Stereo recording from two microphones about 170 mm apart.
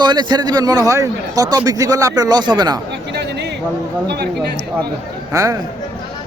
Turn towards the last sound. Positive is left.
turn(degrees=-20)  # may be behind; listen again after turning